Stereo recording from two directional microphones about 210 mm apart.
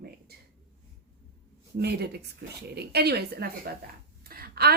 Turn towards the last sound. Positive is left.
turn(degrees=-45)  # may be behind; listen again after turning